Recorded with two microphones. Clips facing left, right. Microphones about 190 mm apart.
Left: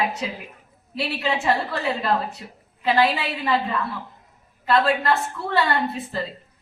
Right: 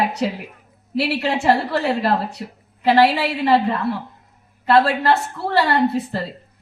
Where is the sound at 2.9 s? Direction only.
40° right (ahead or behind).